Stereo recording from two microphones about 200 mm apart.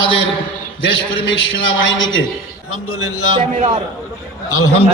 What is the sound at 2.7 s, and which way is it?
Speech, 90° left.